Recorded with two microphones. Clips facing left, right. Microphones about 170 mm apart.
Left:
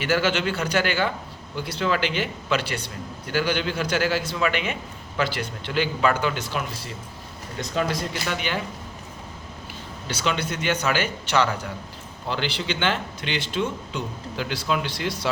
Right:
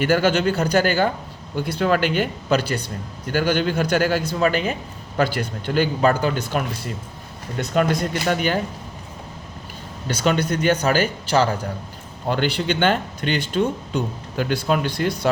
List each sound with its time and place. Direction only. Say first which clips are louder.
0.0 s a man's voice: right 5 dB; 45° right (ahead or behind)
10.2 s a man's voice: right 6 dB; 45° right (ahead or behind)
12.3 s a man's voice: right 6 dB; 50° right (ahead or behind)